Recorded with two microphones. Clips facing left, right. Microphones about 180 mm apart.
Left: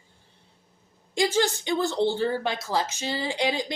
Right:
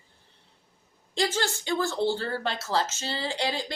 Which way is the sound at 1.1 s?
15° left (ahead or behind).